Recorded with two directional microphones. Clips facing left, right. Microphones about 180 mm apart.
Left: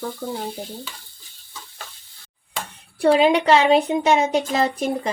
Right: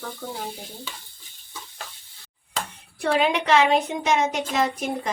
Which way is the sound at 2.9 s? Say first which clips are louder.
Left 6 dB; 35° left (ahead or behind).